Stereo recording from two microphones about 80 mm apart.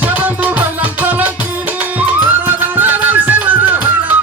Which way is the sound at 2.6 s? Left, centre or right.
Right.